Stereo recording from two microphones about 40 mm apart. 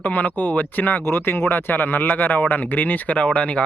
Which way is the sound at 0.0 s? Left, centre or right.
Left.